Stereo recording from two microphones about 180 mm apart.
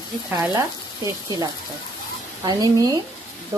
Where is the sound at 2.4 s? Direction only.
20° right (ahead or behind).